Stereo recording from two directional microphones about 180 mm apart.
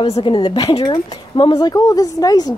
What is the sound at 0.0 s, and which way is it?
Speech, 30° left (ahead or behind).